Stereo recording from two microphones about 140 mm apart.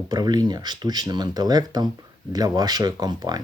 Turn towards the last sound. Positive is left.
turn(degrees=-30)  # may be behind; listen again after turning